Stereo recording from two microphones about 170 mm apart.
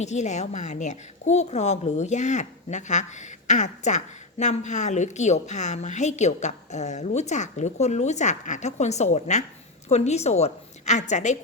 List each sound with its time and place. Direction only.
0.0 s a woman's voice: 45° left (ahead or behind)